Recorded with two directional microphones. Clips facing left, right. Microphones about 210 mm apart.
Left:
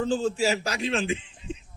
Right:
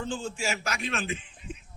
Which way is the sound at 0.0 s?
40° left (ahead or behind).